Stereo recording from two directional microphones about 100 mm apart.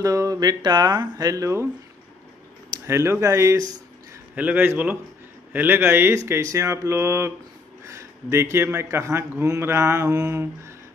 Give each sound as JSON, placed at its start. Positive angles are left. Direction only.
{"t": 0.0, "sound": "speech", "side_deg": -35}
{"t": 2.9, "sound": "speech", "side_deg": -25}
{"t": 4.4, "sound": "a man's voice", "side_deg": -15}
{"t": 7.8, "sound": "a sound", "side_deg": -30}
{"t": 8.6, "sound": "speech", "side_deg": -25}